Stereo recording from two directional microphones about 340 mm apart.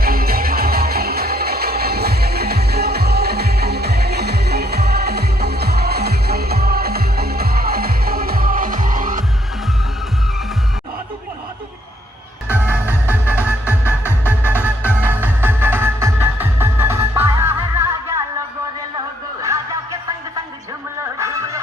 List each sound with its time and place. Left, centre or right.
0.0 s music: right
12.5 s music: centre
13.3 s music: centre
14.8 s music: centre
21.2 s music: centre